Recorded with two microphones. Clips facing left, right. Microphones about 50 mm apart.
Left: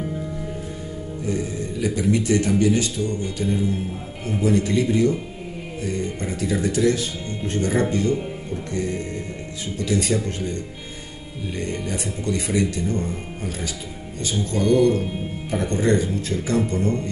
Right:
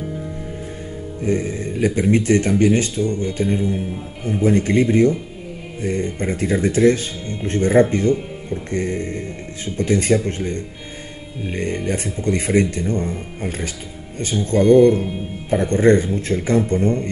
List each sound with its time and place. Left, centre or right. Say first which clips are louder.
1.2 s speech: right 5 dB; right
4.5 s speech: right 4 dB; right